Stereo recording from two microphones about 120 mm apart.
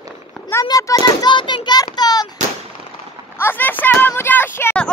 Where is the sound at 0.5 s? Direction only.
25° left (ahead or behind).